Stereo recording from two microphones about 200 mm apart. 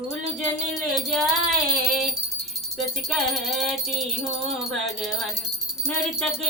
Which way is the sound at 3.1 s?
Centre (ahead or behind).